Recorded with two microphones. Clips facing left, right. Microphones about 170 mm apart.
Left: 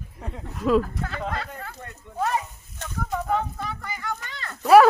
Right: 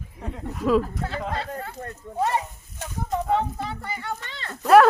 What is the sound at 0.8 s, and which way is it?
Speech, 30° right (ahead or behind).